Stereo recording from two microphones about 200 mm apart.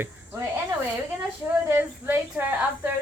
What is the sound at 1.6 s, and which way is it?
Speech, 10° right (ahead or behind).